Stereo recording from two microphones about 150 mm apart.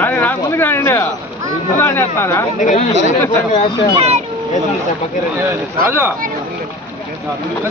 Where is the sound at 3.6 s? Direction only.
30° left (ahead or behind).